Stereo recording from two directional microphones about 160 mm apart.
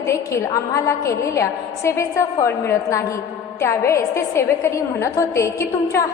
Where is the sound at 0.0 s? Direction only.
15° left (ahead or behind).